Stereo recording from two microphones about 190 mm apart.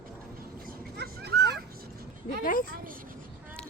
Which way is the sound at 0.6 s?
50° right (ahead or behind).